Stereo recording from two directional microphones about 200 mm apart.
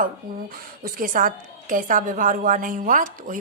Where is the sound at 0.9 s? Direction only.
45° right (ahead or behind).